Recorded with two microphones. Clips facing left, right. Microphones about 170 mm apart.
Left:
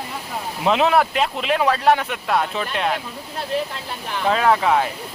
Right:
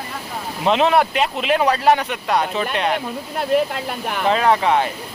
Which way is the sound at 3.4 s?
55° right (ahead or behind).